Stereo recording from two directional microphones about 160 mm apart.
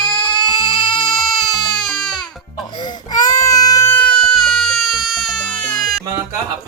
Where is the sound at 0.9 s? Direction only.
Centre (ahead or behind).